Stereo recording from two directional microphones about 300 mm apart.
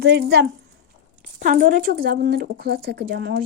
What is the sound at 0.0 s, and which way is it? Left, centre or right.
Speech, right.